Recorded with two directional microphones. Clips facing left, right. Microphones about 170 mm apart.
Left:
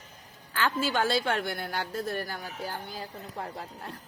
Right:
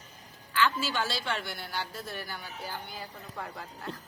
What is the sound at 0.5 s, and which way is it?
A woman's voice, 50° left (ahead or behind).